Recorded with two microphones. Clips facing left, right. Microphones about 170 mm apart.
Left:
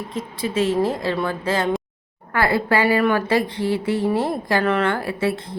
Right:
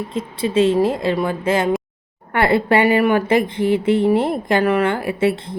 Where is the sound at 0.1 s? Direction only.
25° right (ahead or behind).